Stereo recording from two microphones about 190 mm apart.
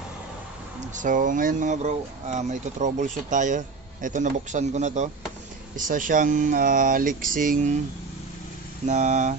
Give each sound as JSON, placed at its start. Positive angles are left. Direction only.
{"t": 0.7, "sound": "speech", "side_deg": -40}
{"t": 8.8, "sound": "speech", "side_deg": -40}